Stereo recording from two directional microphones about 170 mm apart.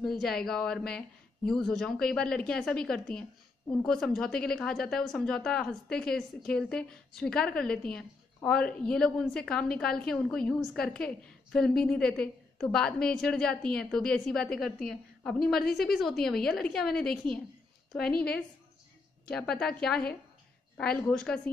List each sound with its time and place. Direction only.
0.0 s a woman's voice: centre (ahead or behind)
19.2 s speech: 5° left (ahead or behind)